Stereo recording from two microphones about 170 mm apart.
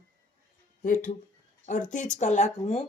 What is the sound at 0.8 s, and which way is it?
Speech, 50° left (ahead or behind).